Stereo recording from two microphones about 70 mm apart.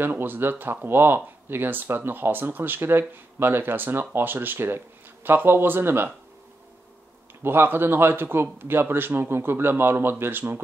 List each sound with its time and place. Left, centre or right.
0.0 s speech: right
7.4 s speech: right